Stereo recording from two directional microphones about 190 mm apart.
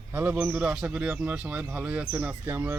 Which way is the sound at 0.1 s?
10° right (ahead or behind).